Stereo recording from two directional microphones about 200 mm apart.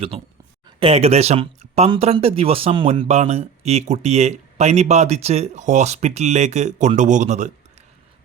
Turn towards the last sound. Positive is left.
turn(degrees=-35)  # may be behind; listen again after turning